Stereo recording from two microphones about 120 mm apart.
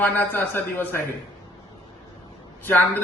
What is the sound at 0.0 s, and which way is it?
Speech, 15° left (ahead or behind).